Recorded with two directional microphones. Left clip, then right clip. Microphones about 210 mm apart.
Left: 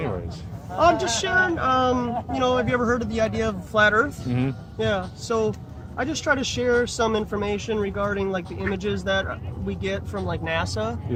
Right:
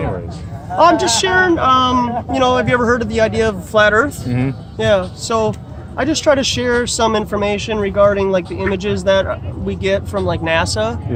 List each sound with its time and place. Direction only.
0.8 s speech: 55° right (ahead or behind)
4.3 s speech: 20° left (ahead or behind)
4.8 s speech: 55° right (ahead or behind)